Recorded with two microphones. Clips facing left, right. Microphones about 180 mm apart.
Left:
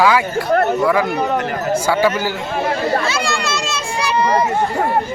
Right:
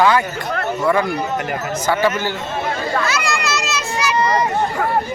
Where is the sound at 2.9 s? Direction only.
30° left (ahead or behind).